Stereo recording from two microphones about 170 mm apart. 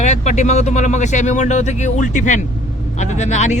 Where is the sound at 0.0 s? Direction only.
45° left (ahead or behind).